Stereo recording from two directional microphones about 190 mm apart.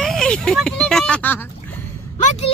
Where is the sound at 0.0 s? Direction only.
5° left (ahead or behind).